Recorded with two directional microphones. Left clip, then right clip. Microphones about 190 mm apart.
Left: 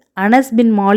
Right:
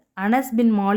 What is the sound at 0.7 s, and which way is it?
Speech, 25° left (ahead or behind).